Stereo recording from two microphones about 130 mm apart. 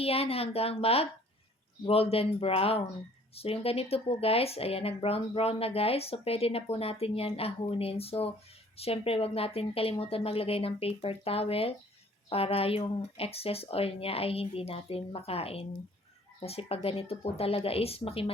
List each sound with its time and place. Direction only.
0.0 s speech: 50° left (ahead or behind)